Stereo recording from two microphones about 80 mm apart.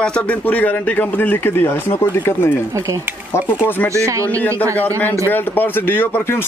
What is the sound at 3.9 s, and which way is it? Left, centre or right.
Speech, right.